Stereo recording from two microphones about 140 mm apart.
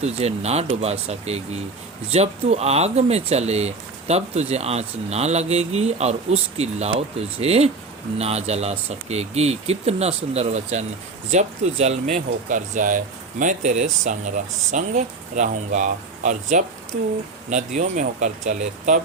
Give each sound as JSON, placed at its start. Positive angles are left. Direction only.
{"t": 0.0, "sound": "speech", "side_deg": -50}